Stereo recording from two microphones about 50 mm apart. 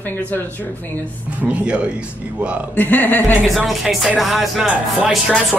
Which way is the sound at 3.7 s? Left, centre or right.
Centre.